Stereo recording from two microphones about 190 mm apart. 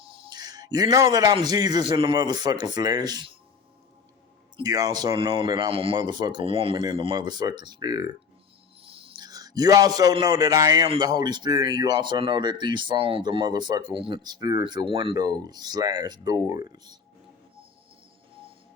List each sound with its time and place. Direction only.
0.0 s a sound: 30° right (ahead or behind)
1.5 s a man's voice: 20° right (ahead or behind)
4.5 s a man's voice: 20° right (ahead or behind)